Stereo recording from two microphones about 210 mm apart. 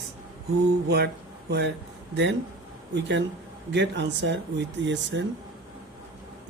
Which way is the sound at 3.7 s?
55° right (ahead or behind).